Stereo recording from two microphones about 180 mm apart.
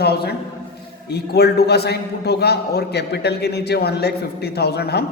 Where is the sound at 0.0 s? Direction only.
65° left (ahead or behind).